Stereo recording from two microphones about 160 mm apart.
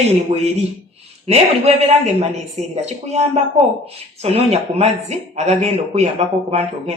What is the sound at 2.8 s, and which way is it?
Speech, 40° right (ahead or behind).